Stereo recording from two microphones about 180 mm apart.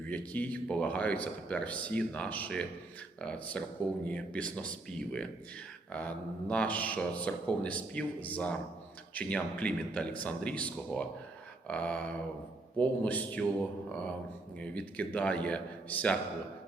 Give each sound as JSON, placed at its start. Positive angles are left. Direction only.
{"t": 0.1, "sound": "speech", "side_deg": 10}
{"t": 11.7, "sound": "a sound", "side_deg": 5}
{"t": 12.7, "sound": "speech", "side_deg": 10}
{"t": 14.6, "sound": "speech", "side_deg": 5}